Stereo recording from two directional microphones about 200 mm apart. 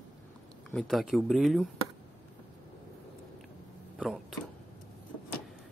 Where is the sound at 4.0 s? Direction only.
Centre (ahead or behind).